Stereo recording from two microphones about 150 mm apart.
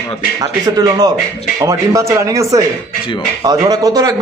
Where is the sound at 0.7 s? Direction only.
25° right (ahead or behind).